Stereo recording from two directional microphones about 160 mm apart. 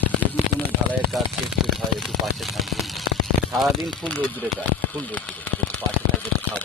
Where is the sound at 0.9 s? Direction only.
Centre (ahead or behind).